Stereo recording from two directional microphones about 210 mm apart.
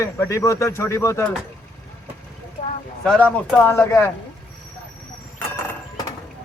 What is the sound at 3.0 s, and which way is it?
Speech, 5° left (ahead or behind).